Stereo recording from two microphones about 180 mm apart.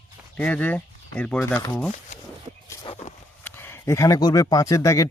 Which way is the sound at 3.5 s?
10° left (ahead or behind).